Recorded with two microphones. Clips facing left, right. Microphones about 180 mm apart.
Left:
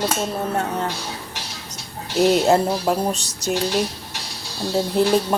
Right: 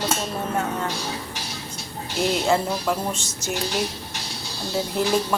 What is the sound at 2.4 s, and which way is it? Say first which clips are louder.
Speech: left 4 dB; 40° left (ahead or behind).